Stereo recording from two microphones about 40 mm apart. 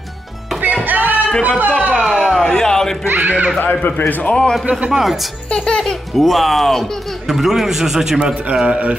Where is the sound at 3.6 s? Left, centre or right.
Left.